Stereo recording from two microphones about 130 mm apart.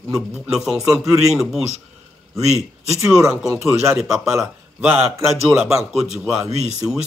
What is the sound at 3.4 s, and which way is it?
Music, 20° right (ahead or behind).